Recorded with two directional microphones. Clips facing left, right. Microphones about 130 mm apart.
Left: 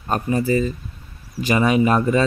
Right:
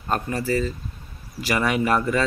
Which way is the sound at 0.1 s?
20° left (ahead or behind).